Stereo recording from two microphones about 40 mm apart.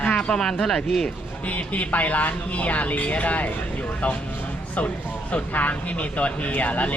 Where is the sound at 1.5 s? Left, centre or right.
Left.